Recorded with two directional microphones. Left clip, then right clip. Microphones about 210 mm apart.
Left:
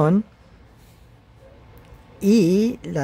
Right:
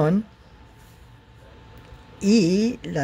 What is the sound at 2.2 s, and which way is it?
Speech, 15° left (ahead or behind).